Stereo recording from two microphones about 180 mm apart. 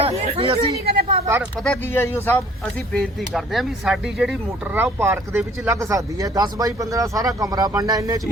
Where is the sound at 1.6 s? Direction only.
10° left (ahead or behind); by 8.2 s 20° right (ahead or behind).